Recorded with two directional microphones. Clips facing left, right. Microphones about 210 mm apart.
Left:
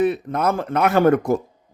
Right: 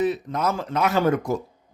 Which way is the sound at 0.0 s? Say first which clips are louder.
Left 4 dB; 60° left (ahead or behind).